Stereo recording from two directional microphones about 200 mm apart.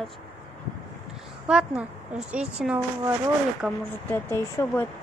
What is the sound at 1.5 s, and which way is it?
A woman's voice, 5° right (ahead or behind).